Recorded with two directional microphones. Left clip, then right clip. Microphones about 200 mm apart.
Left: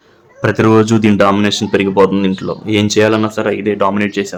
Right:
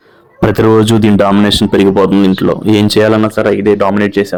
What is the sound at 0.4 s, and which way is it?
Speech, 35° right (ahead or behind).